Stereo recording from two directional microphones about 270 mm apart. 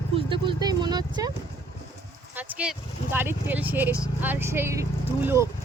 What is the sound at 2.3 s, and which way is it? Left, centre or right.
Speech, centre.